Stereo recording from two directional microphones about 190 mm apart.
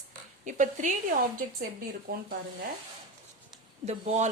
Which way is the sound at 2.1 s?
50° right (ahead or behind).